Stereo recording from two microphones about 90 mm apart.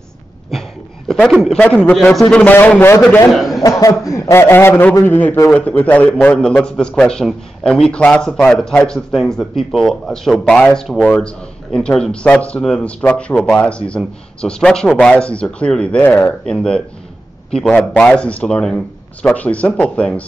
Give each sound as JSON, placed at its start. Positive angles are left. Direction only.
{"t": 0.5, "sound": "a sound", "side_deg": 5}
{"t": 1.6, "sound": "a man's voice", "side_deg": 15}
{"t": 2.4, "sound": "a man's voice", "side_deg": 20}
{"t": 3.3, "sound": "a man's voice", "side_deg": 0}
{"t": 3.6, "sound": "a man's voice", "side_deg": 40}